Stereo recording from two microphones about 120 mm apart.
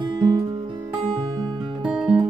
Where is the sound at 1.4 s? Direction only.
35° right (ahead or behind).